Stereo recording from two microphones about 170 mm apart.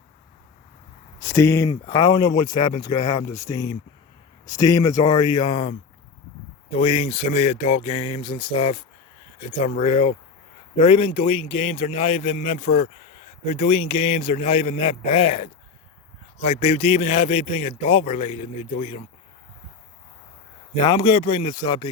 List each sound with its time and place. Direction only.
1.2 s speech: 15° left (ahead or behind)
6.7 s a man's voice: 35° left (ahead or behind)
20.7 s speech: 25° left (ahead or behind)